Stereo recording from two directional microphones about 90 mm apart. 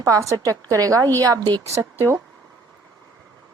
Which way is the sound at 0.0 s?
40° right (ahead or behind).